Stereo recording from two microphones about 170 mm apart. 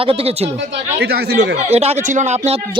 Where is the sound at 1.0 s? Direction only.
75° right (ahead or behind).